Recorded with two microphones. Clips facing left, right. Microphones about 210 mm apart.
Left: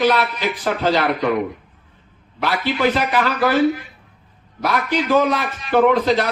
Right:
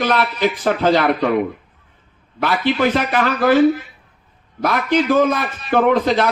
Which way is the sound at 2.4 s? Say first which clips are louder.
Right 2 dB; 50° right (ahead or behind).